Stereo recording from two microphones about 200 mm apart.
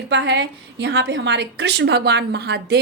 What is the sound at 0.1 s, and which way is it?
A woman's voice, 60° right (ahead or behind).